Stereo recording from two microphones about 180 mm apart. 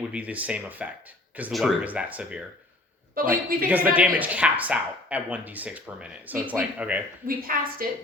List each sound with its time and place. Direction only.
0.1 s speech: 10° right (ahead or behind)
3.2 s a woman's voice: 55° right (ahead or behind)
3.7 s speech: 10° right (ahead or behind)
7.3 s a woman's voice: 55° right (ahead or behind)